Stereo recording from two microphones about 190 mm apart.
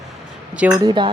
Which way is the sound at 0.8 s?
25° right (ahead or behind).